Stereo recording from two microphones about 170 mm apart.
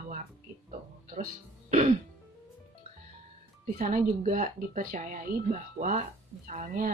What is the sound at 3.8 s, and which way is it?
Speech, 45° right (ahead or behind).